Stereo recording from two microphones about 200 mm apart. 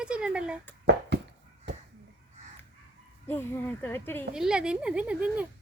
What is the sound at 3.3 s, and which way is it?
Speech, 10° left (ahead or behind).